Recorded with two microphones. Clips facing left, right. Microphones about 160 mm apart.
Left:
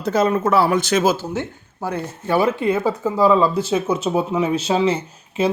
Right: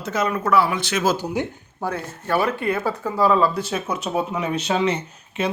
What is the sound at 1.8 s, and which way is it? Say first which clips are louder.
Speech: left 2 dB; 10° left (ahead or behind).